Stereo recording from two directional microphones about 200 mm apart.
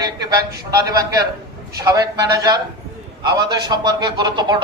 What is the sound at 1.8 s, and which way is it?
Speech, 20° right (ahead or behind).